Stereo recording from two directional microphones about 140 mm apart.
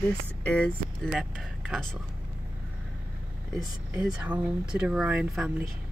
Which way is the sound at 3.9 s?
10° right (ahead or behind).